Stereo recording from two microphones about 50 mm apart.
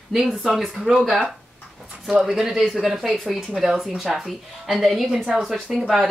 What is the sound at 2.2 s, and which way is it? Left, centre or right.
Speech, centre.